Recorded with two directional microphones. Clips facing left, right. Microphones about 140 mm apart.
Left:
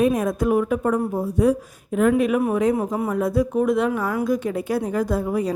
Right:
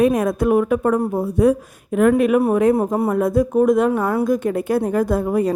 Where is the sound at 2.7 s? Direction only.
40° right (ahead or behind).